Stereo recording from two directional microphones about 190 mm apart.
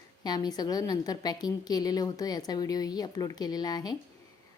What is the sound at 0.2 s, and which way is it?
A woman's voice, 20° left (ahead or behind).